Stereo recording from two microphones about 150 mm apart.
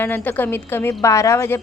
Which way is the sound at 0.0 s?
15° left (ahead or behind).